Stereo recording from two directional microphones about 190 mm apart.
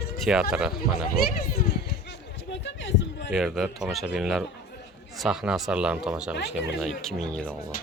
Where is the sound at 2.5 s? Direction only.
70° left (ahead or behind).